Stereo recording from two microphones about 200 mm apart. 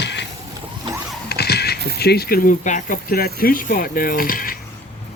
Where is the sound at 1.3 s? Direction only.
55° left (ahead or behind).